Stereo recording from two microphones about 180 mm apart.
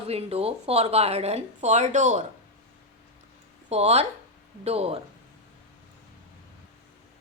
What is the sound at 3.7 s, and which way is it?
A woman's voice, 35° right (ahead or behind).